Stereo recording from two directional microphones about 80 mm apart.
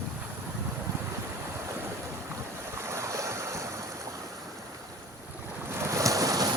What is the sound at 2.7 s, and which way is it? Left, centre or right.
Waves, right.